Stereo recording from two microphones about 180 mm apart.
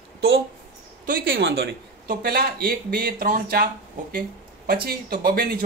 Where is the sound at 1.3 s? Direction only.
70° right (ahead or behind).